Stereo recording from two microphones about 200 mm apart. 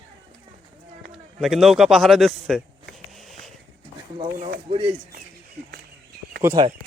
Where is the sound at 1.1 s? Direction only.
Centre (ahead or behind).